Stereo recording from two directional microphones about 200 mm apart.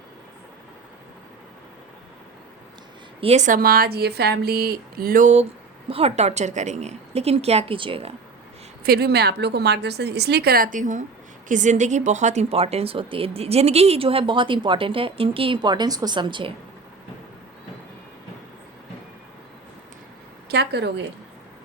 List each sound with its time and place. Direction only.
3.2 s a woman's voice: 35° right (ahead or behind)
8.8 s a woman's voice: 50° right (ahead or behind); by 16.6 s 25° right (ahead or behind)
20.5 s a woman's voice: 55° right (ahead or behind)